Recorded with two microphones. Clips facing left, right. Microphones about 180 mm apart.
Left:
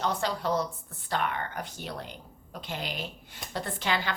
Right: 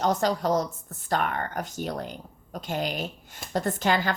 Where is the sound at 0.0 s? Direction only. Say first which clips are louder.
Right 5 dB; 45° right (ahead or behind).